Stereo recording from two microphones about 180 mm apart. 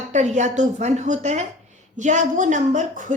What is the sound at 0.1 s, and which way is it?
A woman's voice, 40° right (ahead or behind).